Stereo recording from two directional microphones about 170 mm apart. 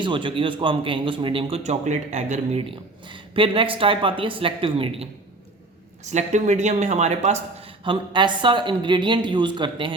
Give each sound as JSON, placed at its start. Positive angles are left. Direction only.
{"t": 0.0, "sound": "a man's voice", "side_deg": -30}
{"t": 6.1, "sound": "speech", "side_deg": -45}
{"t": 7.9, "sound": "a woman's voice", "side_deg": -25}